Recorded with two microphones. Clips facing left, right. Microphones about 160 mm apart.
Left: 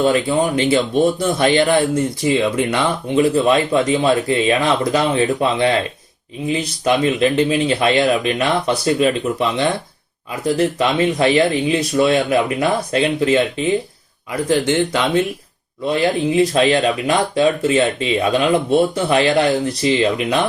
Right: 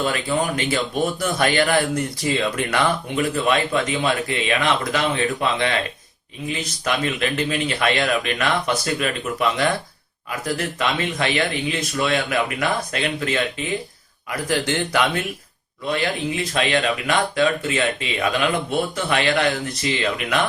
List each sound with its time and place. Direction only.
0.0 s speech: 30° left (ahead or behind)
14.4 s speech: 20° left (ahead or behind)
15.9 s speech: 30° left (ahead or behind)